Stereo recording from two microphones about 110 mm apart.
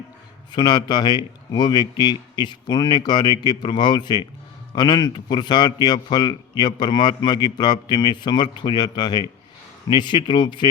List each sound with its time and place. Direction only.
0.5 s a man's voice: 40° left (ahead or behind)